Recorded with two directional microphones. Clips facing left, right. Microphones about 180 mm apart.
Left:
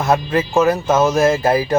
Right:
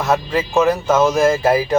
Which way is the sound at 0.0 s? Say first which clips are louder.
Left 1 dB; 5° left (ahead or behind).